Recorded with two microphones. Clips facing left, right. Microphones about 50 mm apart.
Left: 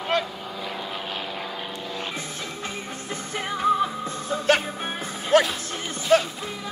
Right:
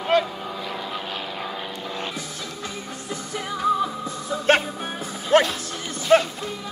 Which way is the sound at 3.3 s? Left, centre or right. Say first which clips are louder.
Even; left.